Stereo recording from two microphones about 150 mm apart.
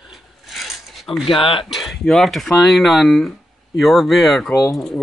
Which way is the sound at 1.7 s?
Centre (ahead or behind).